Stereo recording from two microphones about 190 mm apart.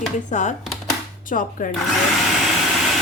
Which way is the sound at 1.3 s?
45° left (ahead or behind).